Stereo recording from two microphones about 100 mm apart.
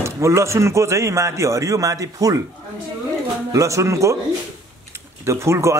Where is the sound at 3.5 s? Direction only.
30° right (ahead or behind).